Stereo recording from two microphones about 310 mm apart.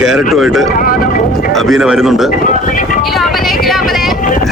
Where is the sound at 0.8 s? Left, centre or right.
Left.